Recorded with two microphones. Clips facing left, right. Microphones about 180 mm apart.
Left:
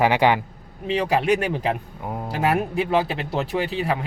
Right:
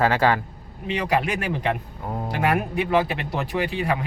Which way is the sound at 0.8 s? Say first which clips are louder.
Left 3 dB; 30° left (ahead or behind).